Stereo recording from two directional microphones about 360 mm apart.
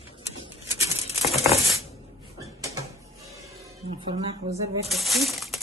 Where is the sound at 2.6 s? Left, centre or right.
Centre.